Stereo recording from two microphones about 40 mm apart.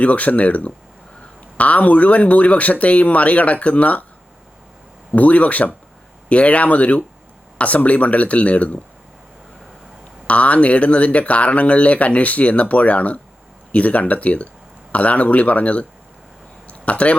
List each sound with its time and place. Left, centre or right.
0.0 s speech: left
5.1 s speech: left
10.2 s speech: left
16.6 s a sound: left